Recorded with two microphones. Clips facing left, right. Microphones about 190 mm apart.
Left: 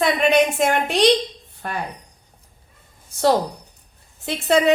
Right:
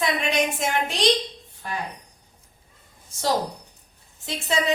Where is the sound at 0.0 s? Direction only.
60° left (ahead or behind).